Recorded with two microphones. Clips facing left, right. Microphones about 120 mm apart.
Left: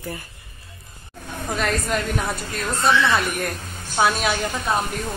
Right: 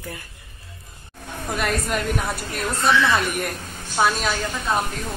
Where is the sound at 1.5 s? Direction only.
5° right (ahead or behind).